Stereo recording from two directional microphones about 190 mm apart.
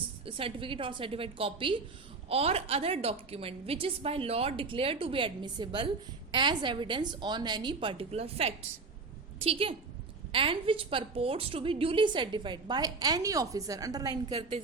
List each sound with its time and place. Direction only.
0.3 s a woman's voice: 30° right (ahead or behind)